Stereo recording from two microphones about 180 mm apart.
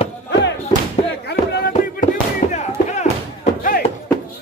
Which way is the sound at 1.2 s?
65° left (ahead or behind).